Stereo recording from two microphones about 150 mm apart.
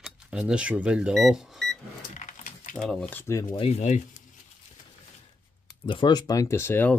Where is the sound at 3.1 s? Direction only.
20° left (ahead or behind).